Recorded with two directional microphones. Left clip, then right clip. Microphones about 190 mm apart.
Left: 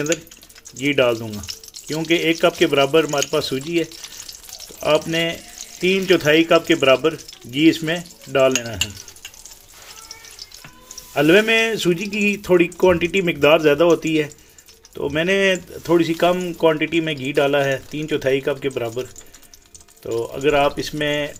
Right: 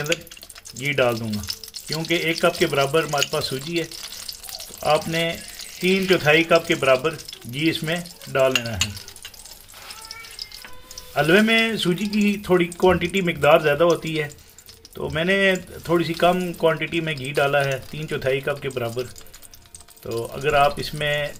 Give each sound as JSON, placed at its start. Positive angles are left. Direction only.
{"t": 0.8, "sound": "speech", "side_deg": 40}
{"t": 4.8, "sound": "speech", "side_deg": 40}
{"t": 11.1, "sound": "speech", "side_deg": 35}
{"t": 20.1, "sound": "speech", "side_deg": 25}
{"t": 20.4, "sound": "speech", "side_deg": 40}